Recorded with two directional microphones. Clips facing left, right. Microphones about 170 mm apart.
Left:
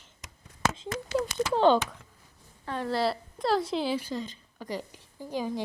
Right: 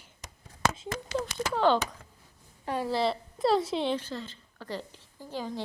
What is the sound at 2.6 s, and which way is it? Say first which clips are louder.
Speech: right 2 dB; 15° right (ahead or behind).